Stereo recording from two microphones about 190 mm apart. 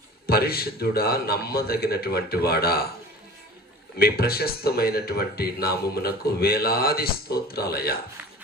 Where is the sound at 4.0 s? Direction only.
55° left (ahead or behind).